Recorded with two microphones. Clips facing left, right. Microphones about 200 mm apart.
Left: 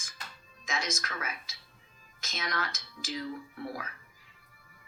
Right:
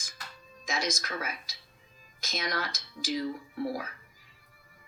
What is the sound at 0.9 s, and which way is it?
A woman's voice, 35° right (ahead or behind).